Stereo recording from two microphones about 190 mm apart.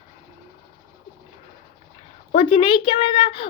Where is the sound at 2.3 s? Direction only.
25° left (ahead or behind).